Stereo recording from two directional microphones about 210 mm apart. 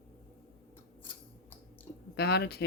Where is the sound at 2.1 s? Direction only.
50° left (ahead or behind).